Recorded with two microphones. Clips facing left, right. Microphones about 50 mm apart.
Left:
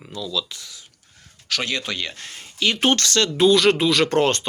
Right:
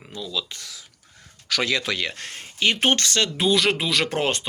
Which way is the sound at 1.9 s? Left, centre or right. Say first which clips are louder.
Right 2 dB; right.